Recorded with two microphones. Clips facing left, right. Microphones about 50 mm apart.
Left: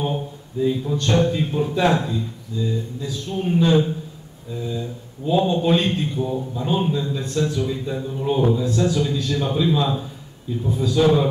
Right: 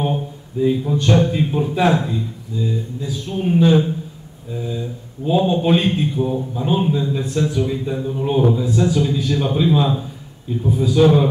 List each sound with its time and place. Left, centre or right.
0.7 s speech: centre
6.7 s speech: centre